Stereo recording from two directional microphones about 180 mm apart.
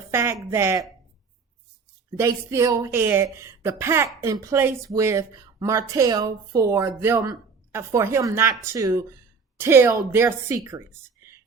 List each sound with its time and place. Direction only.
0.1 s speech: 15° right (ahead or behind)
2.1 s speech: 15° right (ahead or behind)